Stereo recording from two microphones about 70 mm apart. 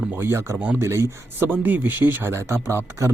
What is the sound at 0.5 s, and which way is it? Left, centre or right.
Speech, right.